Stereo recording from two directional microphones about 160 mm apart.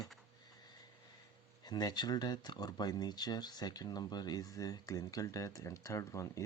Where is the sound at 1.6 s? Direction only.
25° left (ahead or behind).